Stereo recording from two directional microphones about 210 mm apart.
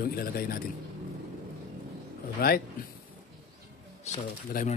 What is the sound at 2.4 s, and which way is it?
Speech, 45° left (ahead or behind).